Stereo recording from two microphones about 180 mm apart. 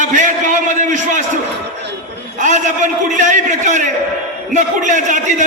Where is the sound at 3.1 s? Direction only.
45° right (ahead or behind).